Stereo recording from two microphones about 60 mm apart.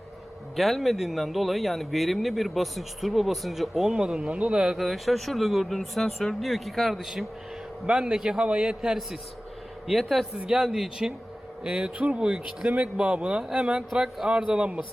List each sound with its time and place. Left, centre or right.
0.5 s a man's voice: centre
4.8 s speech: centre
7.9 s a man's voice: centre
9.8 s speech: centre
10.3 s a man's voice: centre
11.6 s a man's voice: centre